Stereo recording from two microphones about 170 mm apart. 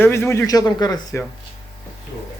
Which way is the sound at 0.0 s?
15° left (ahead or behind).